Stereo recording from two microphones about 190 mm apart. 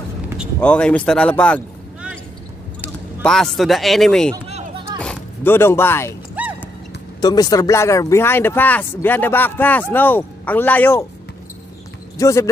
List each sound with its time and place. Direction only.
0.6 s speech: 5° left (ahead or behind)
3.3 s speech: centre (ahead or behind)
6.4 s horse: 10° right (ahead or behind)
7.2 s speech: 20° left (ahead or behind)
12.2 s speech: 15° left (ahead or behind)